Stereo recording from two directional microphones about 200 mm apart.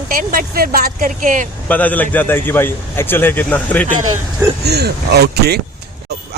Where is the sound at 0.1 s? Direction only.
45° right (ahead or behind).